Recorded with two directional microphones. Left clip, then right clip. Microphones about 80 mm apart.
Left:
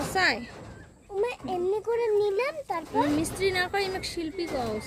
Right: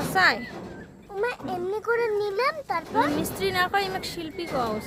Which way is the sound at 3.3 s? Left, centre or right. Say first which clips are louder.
Right 4 dB; left.